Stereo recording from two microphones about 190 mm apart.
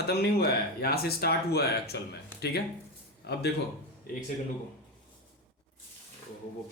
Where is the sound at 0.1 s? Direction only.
55° left (ahead or behind).